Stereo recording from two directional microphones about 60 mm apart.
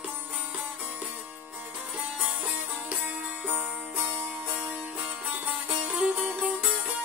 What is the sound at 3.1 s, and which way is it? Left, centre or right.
Music, right.